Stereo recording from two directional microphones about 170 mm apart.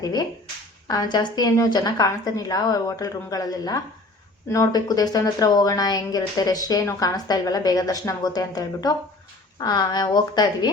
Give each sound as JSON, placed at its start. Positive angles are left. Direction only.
{"t": 0.0, "sound": "speech", "side_deg": 20}